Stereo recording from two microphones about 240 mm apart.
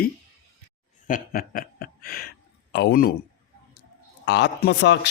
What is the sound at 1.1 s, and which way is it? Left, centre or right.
Speech, left.